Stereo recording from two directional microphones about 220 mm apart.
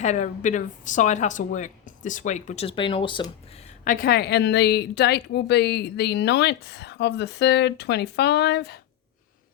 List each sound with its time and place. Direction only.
0.0 s speech: 30° left (ahead or behind)
3.8 s a woman's voice: 40° left (ahead or behind)